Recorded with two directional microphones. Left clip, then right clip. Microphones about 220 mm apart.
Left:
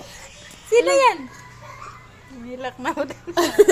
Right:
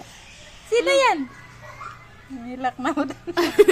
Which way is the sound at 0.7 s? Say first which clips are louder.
Left 3 dB; 20° right (ahead or behind).